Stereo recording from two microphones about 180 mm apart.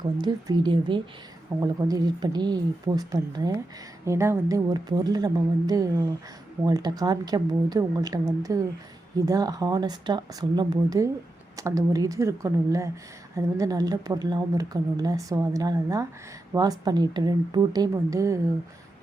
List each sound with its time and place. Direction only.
0.2 s speech: 25° right (ahead or behind)